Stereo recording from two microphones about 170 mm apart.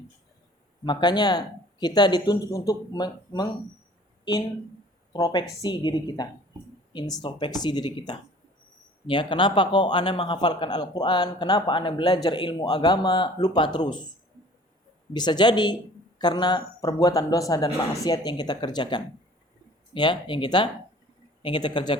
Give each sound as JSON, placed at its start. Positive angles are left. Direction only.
{"t": 0.9, "sound": "a man's voice", "side_deg": 25}
{"t": 5.1, "sound": "a man's voice", "side_deg": 25}
{"t": 15.1, "sound": "a man's voice", "side_deg": 25}